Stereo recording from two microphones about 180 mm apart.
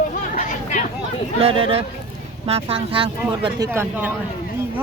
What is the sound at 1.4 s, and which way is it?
Speech, 30° right (ahead or behind).